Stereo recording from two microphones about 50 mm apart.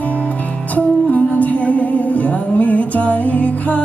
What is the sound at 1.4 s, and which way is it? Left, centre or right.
Music, left.